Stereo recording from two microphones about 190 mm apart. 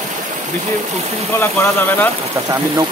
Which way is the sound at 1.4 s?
10° left (ahead or behind).